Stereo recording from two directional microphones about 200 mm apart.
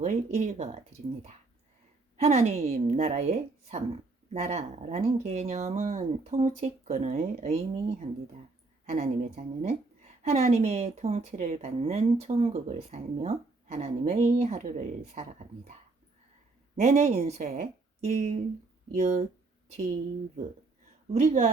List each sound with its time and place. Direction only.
0.0 s speech: 35° right (ahead or behind)
2.1 s speech: 35° right (ahead or behind)
21.1 s speech: 35° right (ahead or behind)